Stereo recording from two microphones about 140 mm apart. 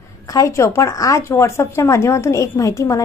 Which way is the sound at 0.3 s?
20° left (ahead or behind).